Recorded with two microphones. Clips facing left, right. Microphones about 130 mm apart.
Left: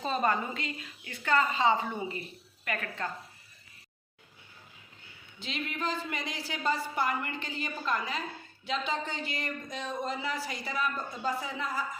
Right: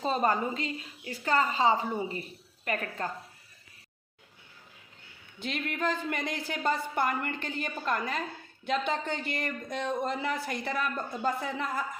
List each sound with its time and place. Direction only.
0.0 s a woman's voice: 35° right (ahead or behind)
5.4 s a woman's voice: 55° right (ahead or behind)